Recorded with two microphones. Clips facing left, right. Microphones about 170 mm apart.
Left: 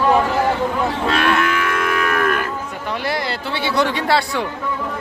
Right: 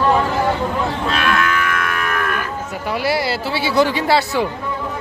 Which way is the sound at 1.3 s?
25° left (ahead or behind).